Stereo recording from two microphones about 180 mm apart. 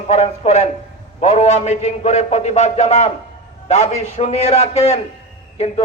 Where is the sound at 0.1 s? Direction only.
35° left (ahead or behind).